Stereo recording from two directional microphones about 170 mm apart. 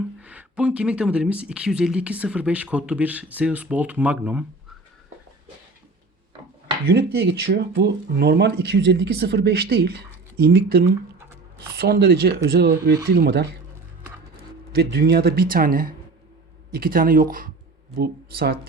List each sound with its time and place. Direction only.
0.2 s speech: 5° right (ahead or behind)
6.8 s speech: 70° right (ahead or behind)
14.7 s speech: 70° right (ahead or behind)